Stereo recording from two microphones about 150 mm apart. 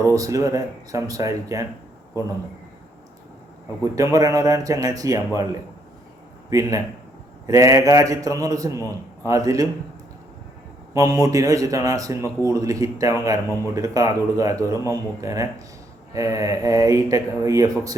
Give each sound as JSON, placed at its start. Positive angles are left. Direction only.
{"t": 0.1, "sound": "speech", "side_deg": -20}
{"t": 3.9, "sound": "speech", "side_deg": -20}
{"t": 10.9, "sound": "speech", "side_deg": -25}